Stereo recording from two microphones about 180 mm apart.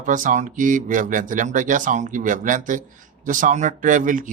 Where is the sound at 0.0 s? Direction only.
45° right (ahead or behind).